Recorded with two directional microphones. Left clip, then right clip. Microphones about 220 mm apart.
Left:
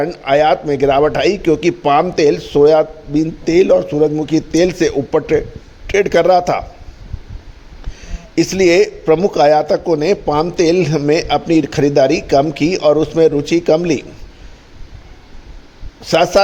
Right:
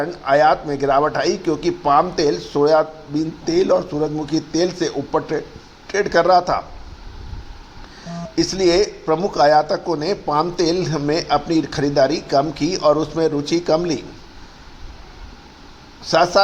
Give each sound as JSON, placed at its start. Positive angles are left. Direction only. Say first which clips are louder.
{"t": 0.0, "sound": "a man's voice", "louder": "left 2 dB", "side_deg": 40}
{"t": 8.4, "sound": "a man's voice", "louder": "left 5 dB", "side_deg": 45}
{"t": 16.0, "sound": "speech", "louder": "left 3 dB", "side_deg": 40}